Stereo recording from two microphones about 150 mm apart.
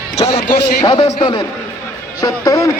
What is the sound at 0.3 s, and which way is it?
Speech, 90° left.